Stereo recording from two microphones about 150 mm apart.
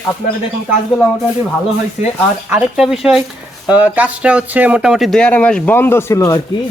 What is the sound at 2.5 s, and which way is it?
Speech, 10° right (ahead or behind).